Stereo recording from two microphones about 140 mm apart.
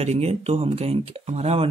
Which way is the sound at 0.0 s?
50° right (ahead or behind).